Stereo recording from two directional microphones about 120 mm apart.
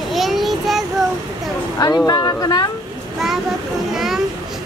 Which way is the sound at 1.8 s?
30° left (ahead or behind).